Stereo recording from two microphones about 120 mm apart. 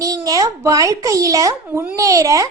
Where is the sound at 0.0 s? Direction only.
30° right (ahead or behind).